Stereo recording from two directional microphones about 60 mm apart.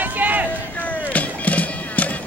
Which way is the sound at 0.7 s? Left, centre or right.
Left.